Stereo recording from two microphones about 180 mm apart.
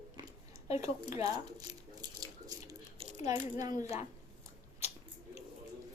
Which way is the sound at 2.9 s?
30° right (ahead or behind).